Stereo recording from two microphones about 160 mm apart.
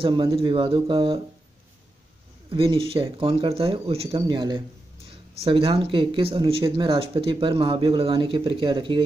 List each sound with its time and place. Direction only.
0.0 s speech: 25° right (ahead or behind)
2.5 s speech: 35° right (ahead or behind)